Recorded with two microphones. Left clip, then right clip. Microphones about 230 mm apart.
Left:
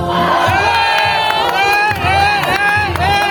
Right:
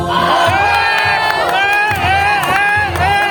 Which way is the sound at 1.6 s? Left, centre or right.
Right.